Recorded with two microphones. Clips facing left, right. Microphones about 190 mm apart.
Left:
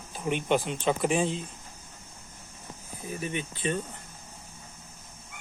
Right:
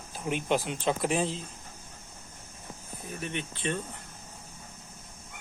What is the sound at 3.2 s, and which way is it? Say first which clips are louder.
Speech: left 2 dB; 5° left (ahead or behind).